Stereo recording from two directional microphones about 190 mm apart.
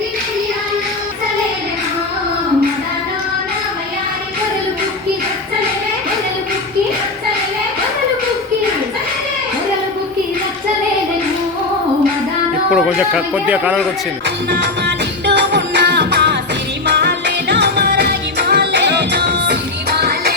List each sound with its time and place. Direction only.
12.7 s speech: 5° right (ahead or behind)
14.5 s music: 65° right (ahead or behind)